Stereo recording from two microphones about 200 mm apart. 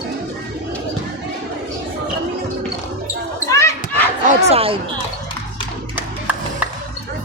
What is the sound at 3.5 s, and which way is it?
Basketball bounce, 15° left (ahead or behind).